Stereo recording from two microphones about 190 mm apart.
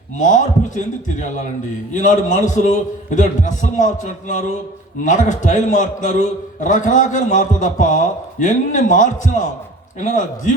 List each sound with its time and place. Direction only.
0.2 s a man's voice: 40° left (ahead or behind)
1.9 s a man's voice: 40° left (ahead or behind)